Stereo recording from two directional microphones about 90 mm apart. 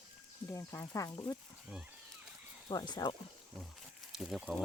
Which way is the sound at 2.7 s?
50° left (ahead or behind).